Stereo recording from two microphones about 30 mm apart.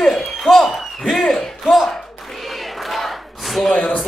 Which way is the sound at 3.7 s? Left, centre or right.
Left.